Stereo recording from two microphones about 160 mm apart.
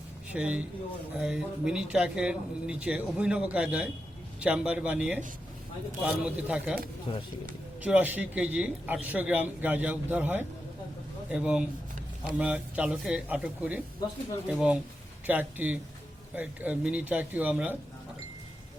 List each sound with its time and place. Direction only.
0.3 s a man's voice: 10° right (ahead or behind)
7.1 s speech: 35° left (ahead or behind)
7.8 s a man's voice: 10° right (ahead or behind)